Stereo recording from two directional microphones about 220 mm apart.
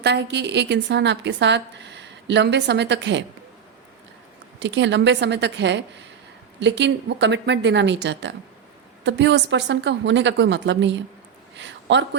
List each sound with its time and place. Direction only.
0.0 s a woman's voice: 50° right (ahead or behind)
4.6 s a woman's voice: 55° right (ahead or behind)
11.5 s a sound: 55° right (ahead or behind)